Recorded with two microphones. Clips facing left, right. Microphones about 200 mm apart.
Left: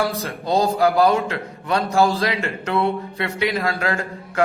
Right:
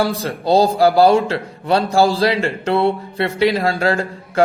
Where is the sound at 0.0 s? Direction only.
30° right (ahead or behind).